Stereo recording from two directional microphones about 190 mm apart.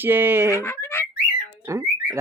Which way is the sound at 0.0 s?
10° right (ahead or behind).